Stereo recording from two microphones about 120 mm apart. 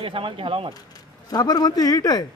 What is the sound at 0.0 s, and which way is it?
Speech, 45° right (ahead or behind).